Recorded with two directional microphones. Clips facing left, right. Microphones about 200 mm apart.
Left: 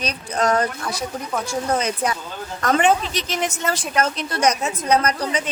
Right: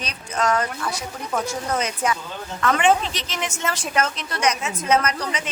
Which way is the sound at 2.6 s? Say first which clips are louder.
Left 1 dB; 40° left (ahead or behind).